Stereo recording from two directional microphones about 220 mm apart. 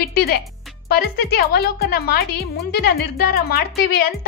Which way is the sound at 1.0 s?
45° left (ahead or behind).